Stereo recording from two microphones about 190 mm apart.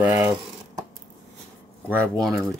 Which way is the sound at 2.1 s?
Centre (ahead or behind).